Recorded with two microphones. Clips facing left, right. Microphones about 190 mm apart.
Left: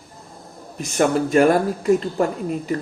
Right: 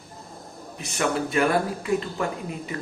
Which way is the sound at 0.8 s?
45° left (ahead or behind).